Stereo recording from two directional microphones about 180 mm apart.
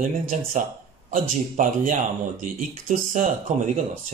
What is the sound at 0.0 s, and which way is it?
Speech, 45° right (ahead or behind).